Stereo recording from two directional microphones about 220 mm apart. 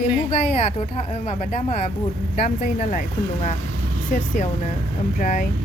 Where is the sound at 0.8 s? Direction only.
30° left (ahead or behind).